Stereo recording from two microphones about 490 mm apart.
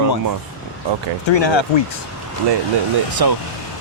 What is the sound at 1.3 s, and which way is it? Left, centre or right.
Speech, left.